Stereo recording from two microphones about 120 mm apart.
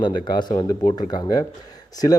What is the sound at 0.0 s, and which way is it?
Speech, 40° left (ahead or behind).